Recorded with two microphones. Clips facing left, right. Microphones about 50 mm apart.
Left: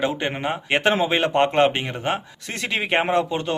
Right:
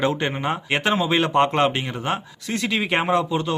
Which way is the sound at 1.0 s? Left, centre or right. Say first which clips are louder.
Even; left.